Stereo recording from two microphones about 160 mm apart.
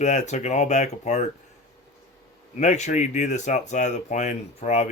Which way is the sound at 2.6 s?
45° left (ahead or behind).